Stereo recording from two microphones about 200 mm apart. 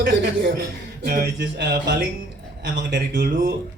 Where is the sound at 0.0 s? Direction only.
55° right (ahead or behind).